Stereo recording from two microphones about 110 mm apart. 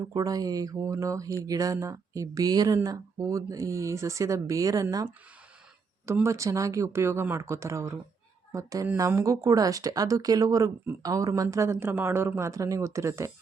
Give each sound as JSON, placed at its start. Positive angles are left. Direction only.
{"t": 0.1, "sound": "speech", "side_deg": -35}
{"t": 6.2, "sound": "speech", "side_deg": -30}